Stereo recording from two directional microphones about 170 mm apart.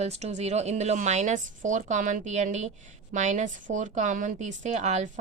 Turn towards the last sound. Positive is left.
turn(degrees=-45)  # may be behind; listen again after turning